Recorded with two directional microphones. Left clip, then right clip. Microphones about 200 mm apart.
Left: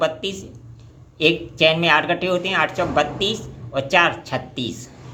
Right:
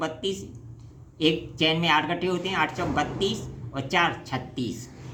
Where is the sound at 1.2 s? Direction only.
20° left (ahead or behind).